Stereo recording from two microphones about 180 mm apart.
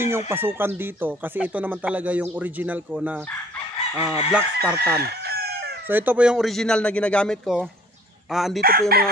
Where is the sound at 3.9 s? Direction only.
15° right (ahead or behind).